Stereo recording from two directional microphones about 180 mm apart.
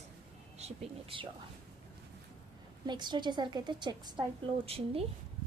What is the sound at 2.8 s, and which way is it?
A woman's voice, 25° right (ahead or behind).